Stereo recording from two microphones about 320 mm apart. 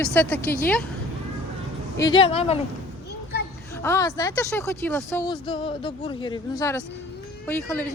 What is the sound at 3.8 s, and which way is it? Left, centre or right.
Speech, centre.